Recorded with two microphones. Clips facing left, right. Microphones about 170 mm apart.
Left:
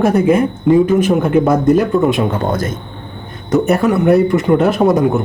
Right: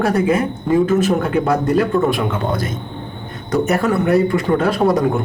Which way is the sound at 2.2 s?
40° left (ahead or behind).